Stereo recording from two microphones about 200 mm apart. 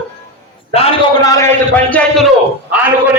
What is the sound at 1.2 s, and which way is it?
A man's voice, 15° left (ahead or behind).